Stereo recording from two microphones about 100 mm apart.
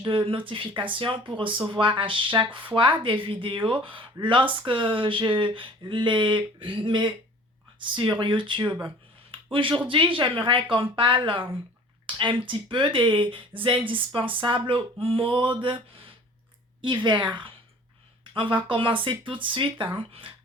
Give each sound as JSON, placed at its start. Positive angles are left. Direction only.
{"t": 0.0, "sound": "speech", "side_deg": -55}